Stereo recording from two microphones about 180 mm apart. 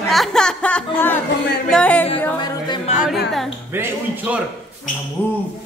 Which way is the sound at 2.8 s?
40° left (ahead or behind).